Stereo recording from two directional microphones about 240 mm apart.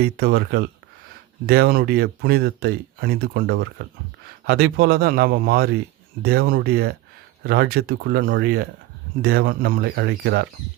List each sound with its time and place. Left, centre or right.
0.2 s speech: right